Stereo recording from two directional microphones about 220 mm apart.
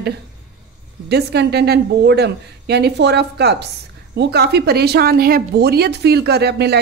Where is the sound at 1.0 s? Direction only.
50° right (ahead or behind).